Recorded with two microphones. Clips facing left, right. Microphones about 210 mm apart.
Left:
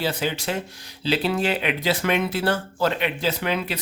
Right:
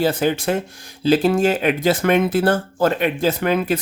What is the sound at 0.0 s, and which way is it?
Speech, 50° right (ahead or behind).